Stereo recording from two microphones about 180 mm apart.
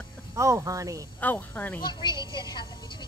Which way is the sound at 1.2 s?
10° left (ahead or behind).